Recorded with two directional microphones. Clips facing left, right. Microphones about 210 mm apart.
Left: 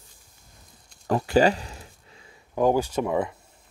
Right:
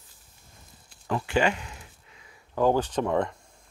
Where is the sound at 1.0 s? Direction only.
40° left (ahead or behind).